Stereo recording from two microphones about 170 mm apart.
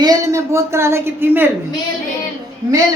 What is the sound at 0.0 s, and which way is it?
Speech, 20° right (ahead or behind).